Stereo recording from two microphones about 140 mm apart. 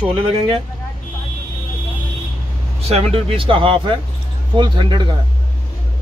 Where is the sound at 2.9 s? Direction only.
45° right (ahead or behind).